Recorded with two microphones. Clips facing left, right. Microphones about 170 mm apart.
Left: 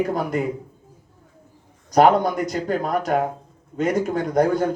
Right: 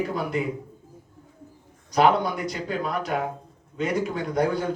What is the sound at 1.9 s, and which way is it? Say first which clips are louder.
Speech: left 5 dB; 45° left (ahead or behind).